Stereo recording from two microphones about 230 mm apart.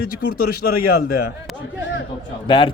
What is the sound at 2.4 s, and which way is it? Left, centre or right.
Speech, left.